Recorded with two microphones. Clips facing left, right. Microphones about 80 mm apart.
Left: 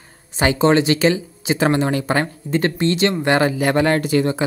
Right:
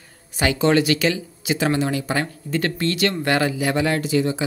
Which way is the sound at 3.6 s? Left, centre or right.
Left.